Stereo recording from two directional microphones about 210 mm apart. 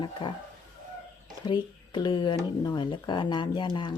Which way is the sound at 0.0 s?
20° left (ahead or behind).